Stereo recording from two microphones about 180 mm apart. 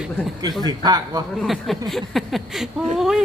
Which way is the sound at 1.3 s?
Centre (ahead or behind).